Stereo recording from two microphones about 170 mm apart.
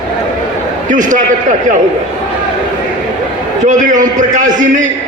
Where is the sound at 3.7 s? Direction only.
50° right (ahead or behind).